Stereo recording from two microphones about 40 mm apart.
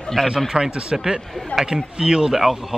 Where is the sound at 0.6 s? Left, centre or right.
Right.